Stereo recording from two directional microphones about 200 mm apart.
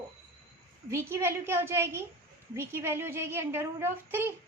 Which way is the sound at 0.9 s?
10° right (ahead or behind).